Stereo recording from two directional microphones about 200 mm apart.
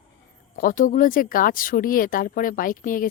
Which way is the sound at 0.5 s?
45° left (ahead or behind).